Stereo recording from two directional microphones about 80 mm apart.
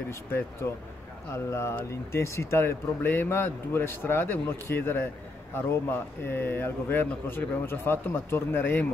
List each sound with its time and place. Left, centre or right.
0.1 s speech: left